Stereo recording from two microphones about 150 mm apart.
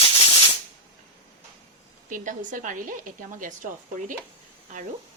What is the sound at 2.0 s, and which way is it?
Speech, 60° right (ahead or behind).